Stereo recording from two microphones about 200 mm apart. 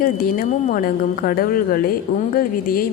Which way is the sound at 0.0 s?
45° left (ahead or behind).